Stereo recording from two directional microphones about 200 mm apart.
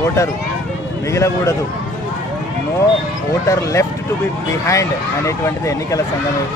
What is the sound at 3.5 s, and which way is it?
Speech, 15° left (ahead or behind).